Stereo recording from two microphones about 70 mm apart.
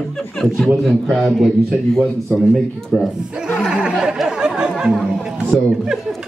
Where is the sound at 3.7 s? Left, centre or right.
Centre.